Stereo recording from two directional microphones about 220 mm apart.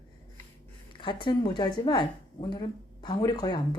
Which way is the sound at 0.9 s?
20° left (ahead or behind).